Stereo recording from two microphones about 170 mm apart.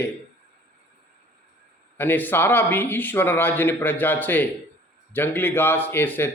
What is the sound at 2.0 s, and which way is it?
Speech, 10° left (ahead or behind).